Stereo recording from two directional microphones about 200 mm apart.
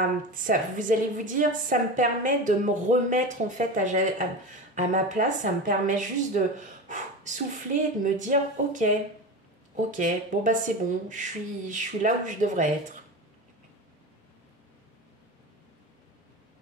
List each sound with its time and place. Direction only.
0.3 s a woman's voice: 40° right (ahead or behind)